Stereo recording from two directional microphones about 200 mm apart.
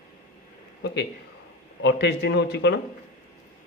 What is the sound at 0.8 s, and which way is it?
A man's voice, 60° left (ahead or behind).